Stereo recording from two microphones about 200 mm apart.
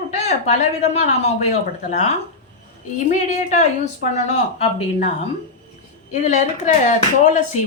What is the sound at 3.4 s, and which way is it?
A woman's voice, 35° left (ahead or behind).